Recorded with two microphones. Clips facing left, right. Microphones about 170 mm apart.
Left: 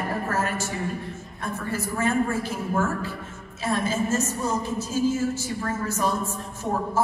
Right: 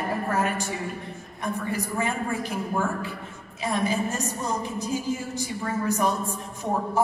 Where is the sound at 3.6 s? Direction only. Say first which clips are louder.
Even; 15° right (ahead or behind).